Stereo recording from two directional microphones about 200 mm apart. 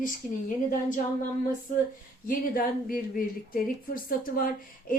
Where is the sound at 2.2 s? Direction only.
45° left (ahead or behind).